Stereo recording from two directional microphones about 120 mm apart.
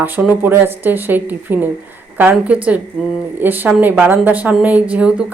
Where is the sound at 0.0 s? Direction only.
15° right (ahead or behind).